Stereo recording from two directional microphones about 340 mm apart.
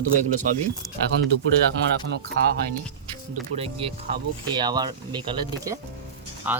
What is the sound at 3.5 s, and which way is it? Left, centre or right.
Speech, right.